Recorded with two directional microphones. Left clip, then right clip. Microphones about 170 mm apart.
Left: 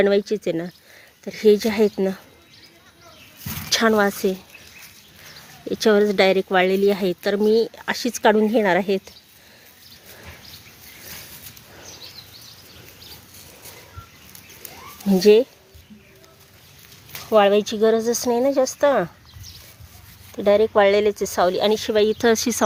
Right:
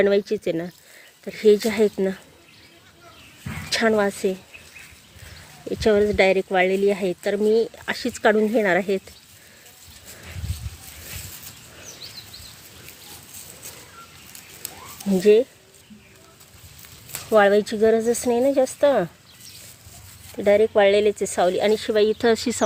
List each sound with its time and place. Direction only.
0.0 s speech: 15° left (ahead or behind)
3.7 s speech: 20° left (ahead or behind)
5.7 s speech: 25° left (ahead or behind)
15.2 s speech: 25° left (ahead or behind)
17.1 s speech: 5° left (ahead or behind)
20.3 s speech: 10° left (ahead or behind)